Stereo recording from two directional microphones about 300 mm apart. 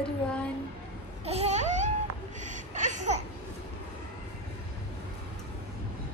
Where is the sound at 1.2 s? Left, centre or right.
Right.